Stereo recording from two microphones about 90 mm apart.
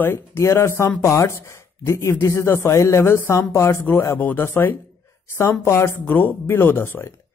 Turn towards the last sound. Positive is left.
turn(degrees=25)  # may be behind; listen again after turning